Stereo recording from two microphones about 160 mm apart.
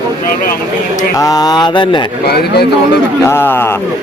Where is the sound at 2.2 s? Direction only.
85° left.